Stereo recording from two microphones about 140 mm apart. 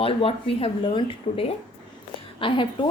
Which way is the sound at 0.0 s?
40° left (ahead or behind).